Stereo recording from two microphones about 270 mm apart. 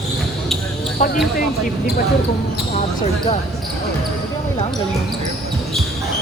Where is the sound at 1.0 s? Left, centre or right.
Left.